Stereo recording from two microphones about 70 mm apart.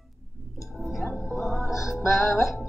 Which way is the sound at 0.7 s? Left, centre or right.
Centre.